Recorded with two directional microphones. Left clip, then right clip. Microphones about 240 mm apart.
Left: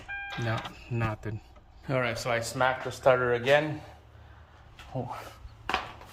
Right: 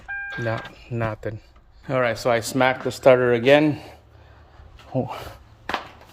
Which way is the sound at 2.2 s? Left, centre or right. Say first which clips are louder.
Right 7 dB; right.